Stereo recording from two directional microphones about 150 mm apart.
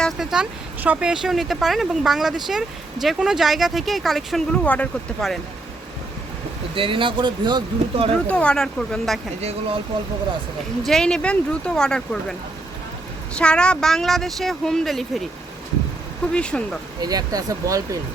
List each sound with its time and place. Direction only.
0.0 s speech: centre (ahead or behind)
6.7 s speech: 35° right (ahead or behind)
8.3 s speech: 5° left (ahead or behind)
9.4 s speech: 45° right (ahead or behind)
10.8 s speech: 5° left (ahead or behind)
13.3 s speech: 5° left (ahead or behind)
16.3 s speech: 5° left (ahead or behind)
17.0 s speech: 25° right (ahead or behind)